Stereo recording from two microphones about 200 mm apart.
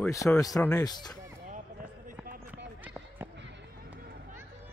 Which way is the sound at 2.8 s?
10° right (ahead or behind).